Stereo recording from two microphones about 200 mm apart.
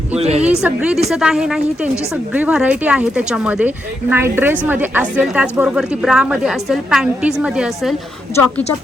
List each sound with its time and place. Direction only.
0.2 s speech: 30° right (ahead or behind)
0.4 s a woman's voice: 5° right (ahead or behind)